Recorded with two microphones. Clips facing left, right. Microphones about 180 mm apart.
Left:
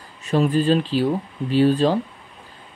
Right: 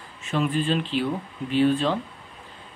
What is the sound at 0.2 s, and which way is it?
Speech, 40° left (ahead or behind).